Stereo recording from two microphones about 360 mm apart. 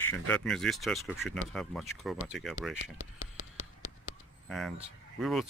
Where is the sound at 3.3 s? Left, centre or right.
Left.